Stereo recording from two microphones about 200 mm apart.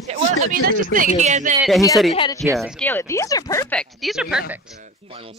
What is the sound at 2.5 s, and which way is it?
Speech, centre (ahead or behind).